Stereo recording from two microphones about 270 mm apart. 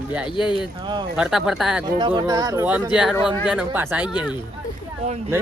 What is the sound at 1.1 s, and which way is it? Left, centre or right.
Speech, centre.